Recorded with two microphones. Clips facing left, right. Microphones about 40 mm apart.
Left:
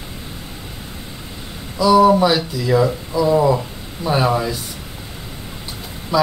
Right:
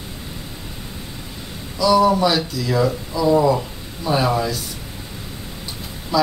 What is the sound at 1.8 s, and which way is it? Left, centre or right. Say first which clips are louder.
Speech: left 3 dB; centre.